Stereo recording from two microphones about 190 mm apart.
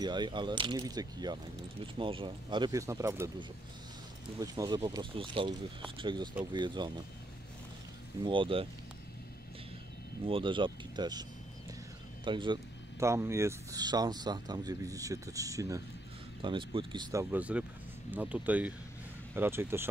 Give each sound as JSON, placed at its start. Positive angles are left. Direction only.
{"t": 0.0, "sound": "speech", "side_deg": -25}
{"t": 8.2, "sound": "speech", "side_deg": -25}
{"t": 10.2, "sound": "speech", "side_deg": -25}
{"t": 12.3, "sound": "speech", "side_deg": -25}
{"t": 13.0, "sound": "speech", "side_deg": -15}